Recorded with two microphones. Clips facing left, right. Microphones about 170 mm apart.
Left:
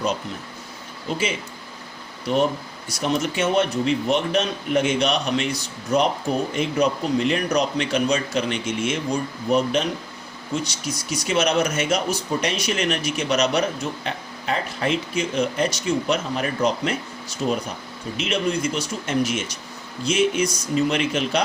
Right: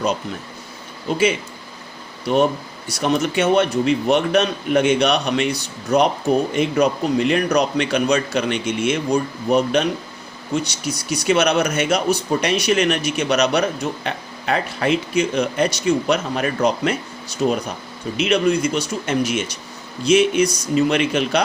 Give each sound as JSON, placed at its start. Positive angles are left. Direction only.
{"t": 2.3, "sound": "speech", "side_deg": -65}